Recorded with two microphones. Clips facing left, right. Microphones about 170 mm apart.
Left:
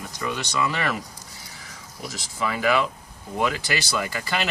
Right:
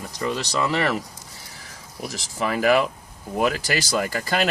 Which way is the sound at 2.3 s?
45° right (ahead or behind).